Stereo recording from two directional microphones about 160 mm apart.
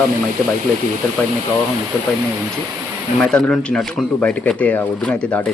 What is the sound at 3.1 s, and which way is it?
Speech, 5° left (ahead or behind).